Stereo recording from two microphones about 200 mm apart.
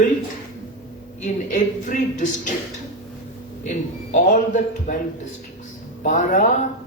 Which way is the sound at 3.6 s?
40° left (ahead or behind).